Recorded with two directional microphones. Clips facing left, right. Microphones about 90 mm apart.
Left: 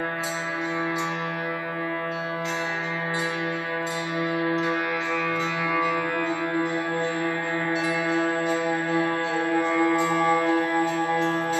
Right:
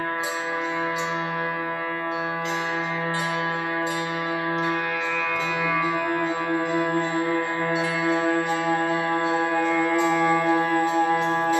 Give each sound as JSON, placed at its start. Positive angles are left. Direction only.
{"t": 9.6, "sound": "music", "side_deg": 20}
{"t": 10.4, "sound": "music", "side_deg": -20}